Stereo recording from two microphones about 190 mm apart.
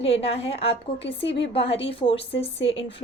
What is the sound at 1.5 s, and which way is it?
Speech, 30° left (ahead or behind).